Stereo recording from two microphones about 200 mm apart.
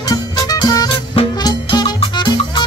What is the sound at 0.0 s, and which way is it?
Music, 20° left (ahead or behind).